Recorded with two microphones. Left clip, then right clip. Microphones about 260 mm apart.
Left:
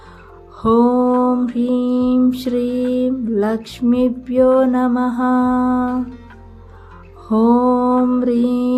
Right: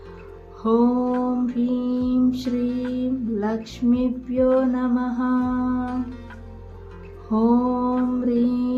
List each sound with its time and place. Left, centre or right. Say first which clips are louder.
0.6 s music: left 6 dB; left
2.9 s female singing: left 8 dB; left
5.8 s music: left 7 dB; centre
7.3 s female singing: left 7 dB; left